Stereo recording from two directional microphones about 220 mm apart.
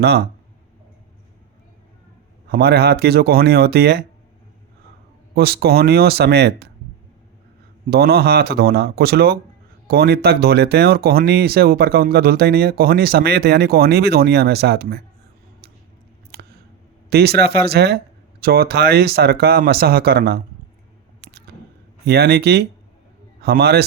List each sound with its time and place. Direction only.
0.0 s speech: 45° right (ahead or behind)
2.5 s speech: 45° right (ahead or behind)
5.3 s speech: 45° right (ahead or behind)
7.9 s speech: 45° right (ahead or behind)
16.3 s a sound: 45° right (ahead or behind)
17.1 s speech: 45° right (ahead or behind)
22.0 s a man's voice: 45° right (ahead or behind)